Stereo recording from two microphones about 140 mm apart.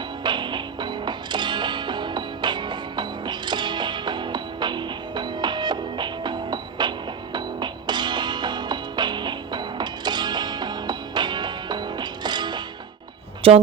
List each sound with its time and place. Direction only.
0.2 s music: 35° right (ahead or behind)
13.4 s speech: 45° right (ahead or behind)